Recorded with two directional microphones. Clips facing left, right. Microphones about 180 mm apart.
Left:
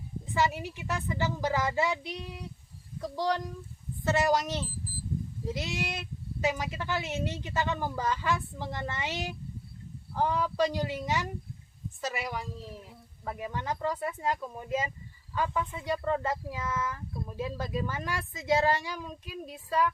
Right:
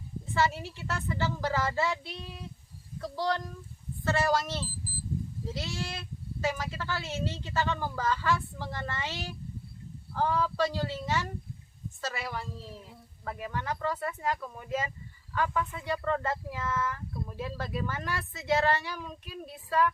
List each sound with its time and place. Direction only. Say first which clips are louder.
0.3 s a child's voice: even; 15° left (ahead or behind)